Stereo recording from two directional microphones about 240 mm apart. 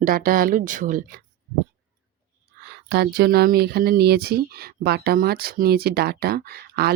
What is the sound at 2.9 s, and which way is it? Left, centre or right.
Speech, right.